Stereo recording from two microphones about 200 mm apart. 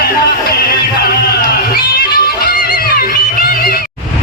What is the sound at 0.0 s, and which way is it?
Music, 50° left (ahead or behind).